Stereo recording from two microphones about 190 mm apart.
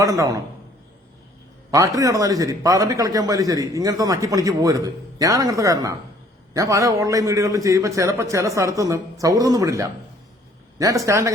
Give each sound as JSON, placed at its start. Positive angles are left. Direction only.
{"t": 0.0, "sound": "a man's voice", "side_deg": -15}
{"t": 1.7, "sound": "a man's voice", "side_deg": -15}